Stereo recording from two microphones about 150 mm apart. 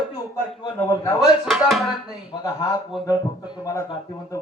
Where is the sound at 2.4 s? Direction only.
25° left (ahead or behind).